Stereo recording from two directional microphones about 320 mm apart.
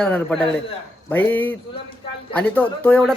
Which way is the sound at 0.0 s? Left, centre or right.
Centre.